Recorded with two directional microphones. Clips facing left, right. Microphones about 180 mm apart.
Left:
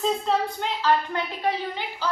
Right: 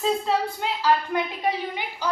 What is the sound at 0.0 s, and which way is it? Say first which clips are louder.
A woman's voice: even; 5° right (ahead or behind).